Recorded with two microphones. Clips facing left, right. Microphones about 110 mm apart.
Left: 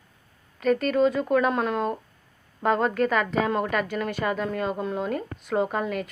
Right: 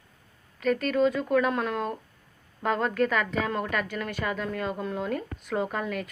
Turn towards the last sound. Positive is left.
turn(degrees=10)  # may be behind; listen again after turning